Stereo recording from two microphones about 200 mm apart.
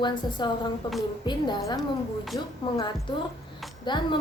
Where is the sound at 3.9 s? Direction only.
25° left (ahead or behind).